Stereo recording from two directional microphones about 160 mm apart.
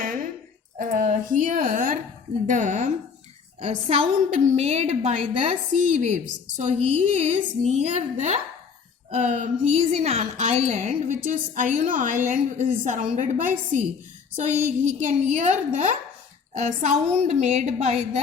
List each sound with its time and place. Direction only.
0.8 s a woman's voice: 55° right (ahead or behind)
3.6 s a woman's voice: 40° right (ahead or behind)